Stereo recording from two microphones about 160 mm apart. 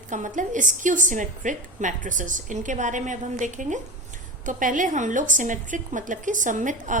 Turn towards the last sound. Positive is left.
turn(degrees=-50)  # may be behind; listen again after turning